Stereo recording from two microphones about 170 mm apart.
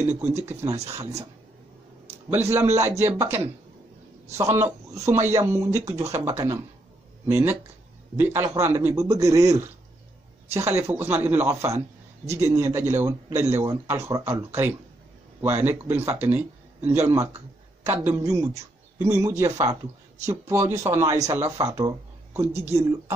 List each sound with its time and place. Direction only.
0.0 s speech: 15° right (ahead or behind)
2.5 s speech: 15° right (ahead or behind)